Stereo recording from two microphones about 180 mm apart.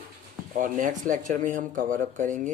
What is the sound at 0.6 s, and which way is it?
Speech, 45° right (ahead or behind).